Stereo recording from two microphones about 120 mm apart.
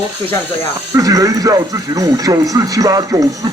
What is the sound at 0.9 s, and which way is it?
Speech, 30° right (ahead or behind).